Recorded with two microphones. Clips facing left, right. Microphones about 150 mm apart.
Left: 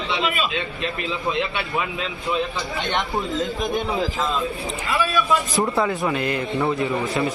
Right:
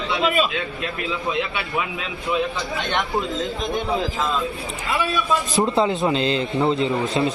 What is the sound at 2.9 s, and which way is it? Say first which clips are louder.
Speech: right 1 dB; 20° left (ahead or behind).